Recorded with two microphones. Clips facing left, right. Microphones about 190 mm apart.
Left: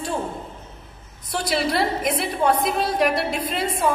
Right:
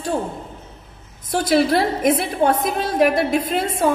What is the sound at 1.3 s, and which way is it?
A woman's voice, 50° right (ahead or behind).